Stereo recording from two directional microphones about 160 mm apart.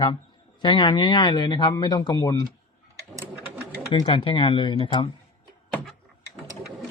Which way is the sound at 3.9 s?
30° left (ahead or behind).